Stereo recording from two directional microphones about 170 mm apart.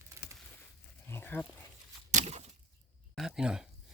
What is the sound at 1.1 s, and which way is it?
Dog, 10° left (ahead or behind).